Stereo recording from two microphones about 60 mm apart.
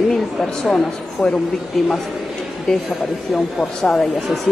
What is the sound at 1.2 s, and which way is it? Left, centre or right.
Speech, left.